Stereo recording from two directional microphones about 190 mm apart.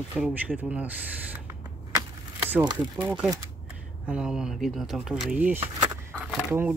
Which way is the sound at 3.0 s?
10° right (ahead or behind).